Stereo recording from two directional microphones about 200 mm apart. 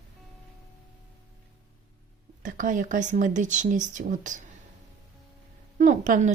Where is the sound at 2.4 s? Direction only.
40° right (ahead or behind).